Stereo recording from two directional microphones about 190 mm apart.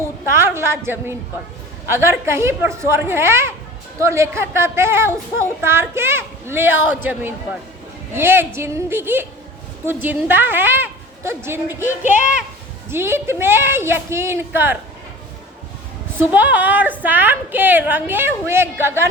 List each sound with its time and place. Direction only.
0.3 s a woman's voice: 10° right (ahead or behind)
1.9 s a woman's voice: 15° right (ahead or behind)
11.9 s speech: 40° left (ahead or behind)
12.9 s a woman's voice: 10° right (ahead or behind)
16.1 s a woman's voice: 10° right (ahead or behind)